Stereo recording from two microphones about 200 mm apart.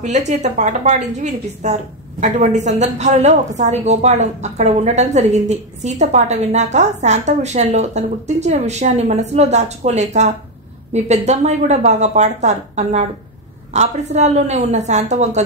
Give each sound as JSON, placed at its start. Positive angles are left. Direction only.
{"t": 0.0, "sound": "a woman's voice", "side_deg": -35}